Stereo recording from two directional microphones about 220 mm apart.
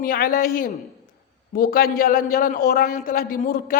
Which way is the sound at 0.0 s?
40° left (ahead or behind).